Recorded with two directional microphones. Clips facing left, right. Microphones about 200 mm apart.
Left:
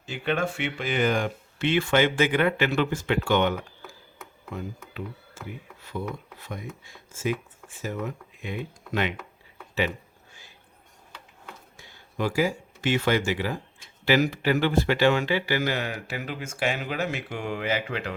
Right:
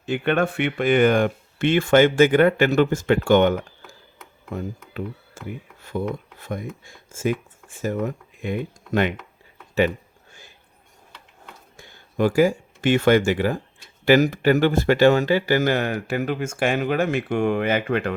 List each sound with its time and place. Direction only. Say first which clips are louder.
0.0 s speech: right 6 dB; 60° right (ahead or behind)
11.8 s speech: right 8 dB; 50° right (ahead or behind)